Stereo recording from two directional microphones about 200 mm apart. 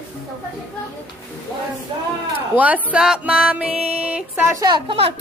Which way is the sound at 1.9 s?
25° right (ahead or behind).